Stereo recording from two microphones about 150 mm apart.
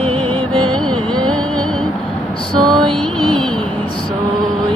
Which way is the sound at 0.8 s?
5° left (ahead or behind).